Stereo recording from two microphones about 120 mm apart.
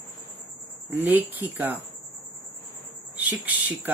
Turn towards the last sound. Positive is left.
turn(degrees=-15)  # may be behind; listen again after turning